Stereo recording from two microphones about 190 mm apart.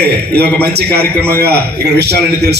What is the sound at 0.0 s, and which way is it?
A man's voice, 60° right (ahead or behind).